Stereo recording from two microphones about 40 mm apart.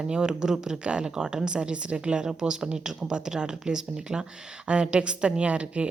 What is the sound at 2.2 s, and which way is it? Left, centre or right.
Speech, centre.